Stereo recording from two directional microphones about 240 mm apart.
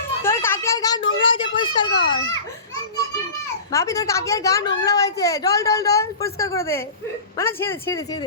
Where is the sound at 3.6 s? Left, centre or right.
Centre.